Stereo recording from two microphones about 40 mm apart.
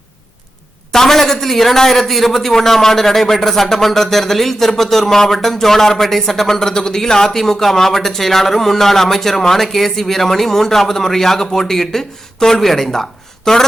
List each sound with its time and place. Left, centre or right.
0.9 s speech: centre